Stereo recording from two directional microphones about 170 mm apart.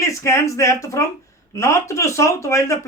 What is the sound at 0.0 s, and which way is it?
Speech, 15° left (ahead or behind).